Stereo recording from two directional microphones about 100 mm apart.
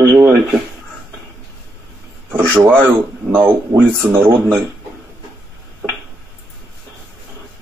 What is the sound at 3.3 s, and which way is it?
Speech, 20° right (ahead or behind).